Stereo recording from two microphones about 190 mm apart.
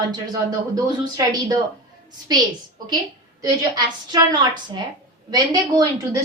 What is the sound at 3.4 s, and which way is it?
A woman's voice, 20° right (ahead or behind).